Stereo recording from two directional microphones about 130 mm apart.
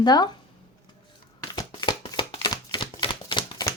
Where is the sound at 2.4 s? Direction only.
35° left (ahead or behind).